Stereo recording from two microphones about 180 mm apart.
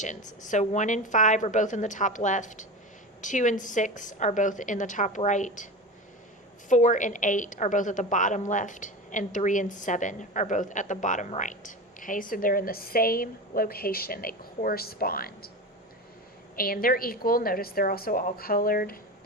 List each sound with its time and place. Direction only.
0.3 s a woman's voice: 45° left (ahead or behind)
6.7 s a woman's voice: 45° left (ahead or behind)
16.6 s a woman's voice: 55° left (ahead or behind)